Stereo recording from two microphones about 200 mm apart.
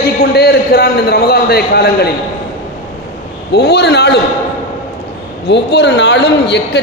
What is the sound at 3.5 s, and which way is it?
Speech, 55° left (ahead or behind).